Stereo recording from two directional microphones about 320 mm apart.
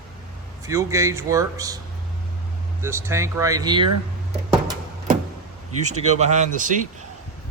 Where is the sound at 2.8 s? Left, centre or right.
Centre.